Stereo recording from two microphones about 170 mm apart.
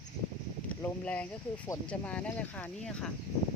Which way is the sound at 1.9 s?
5° left (ahead or behind).